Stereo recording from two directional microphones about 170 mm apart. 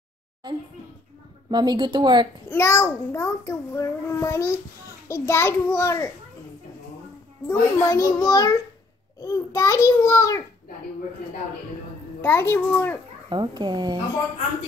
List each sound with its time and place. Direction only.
1.5 s a woman's voice: 25° right (ahead or behind)
2.4 s a child's voice: 15° left (ahead or behind)
7.4 s a child's voice: 15° left (ahead or behind)
12.2 s a child's voice: 15° left (ahead or behind)
13.3 s a woman's voice: 25° right (ahead or behind)